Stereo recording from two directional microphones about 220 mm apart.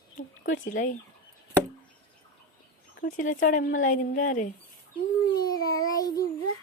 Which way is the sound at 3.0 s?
35° left (ahead or behind).